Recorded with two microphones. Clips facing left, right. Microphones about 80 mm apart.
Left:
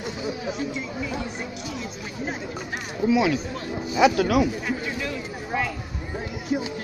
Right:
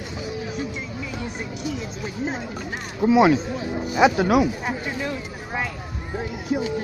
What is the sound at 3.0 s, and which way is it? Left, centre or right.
Speech, right.